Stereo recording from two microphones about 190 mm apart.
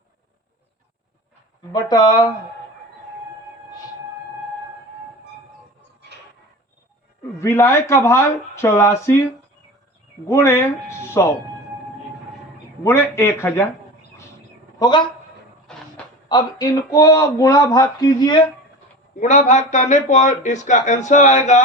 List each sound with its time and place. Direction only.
1.7 s speech: 20° left (ahead or behind)
7.3 s speech: 15° left (ahead or behind)
10.2 s speech: 15° left (ahead or behind)
12.8 s speech: 15° left (ahead or behind)
14.8 s speech: 25° left (ahead or behind)
15.7 s a sound: 5° left (ahead or behind)
16.3 s speech: 20° left (ahead or behind)
19.2 s speech: 40° left (ahead or behind)